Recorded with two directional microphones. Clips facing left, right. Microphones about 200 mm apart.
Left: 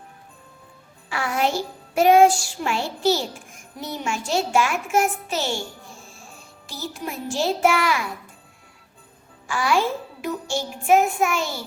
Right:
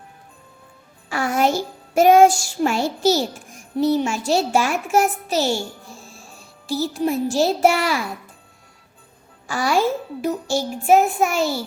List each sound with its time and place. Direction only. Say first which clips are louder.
1.1 s music: right 4 dB; 45° right (ahead or behind)
9.5 s music: right 2 dB; 40° right (ahead or behind)